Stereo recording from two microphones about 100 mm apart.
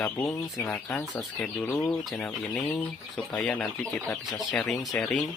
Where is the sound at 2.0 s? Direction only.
5° left (ahead or behind).